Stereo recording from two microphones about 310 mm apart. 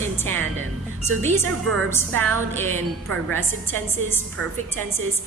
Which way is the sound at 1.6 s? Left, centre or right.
Right.